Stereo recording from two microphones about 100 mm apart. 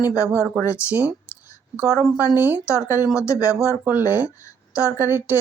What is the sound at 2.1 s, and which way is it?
Speech, 20° right (ahead or behind).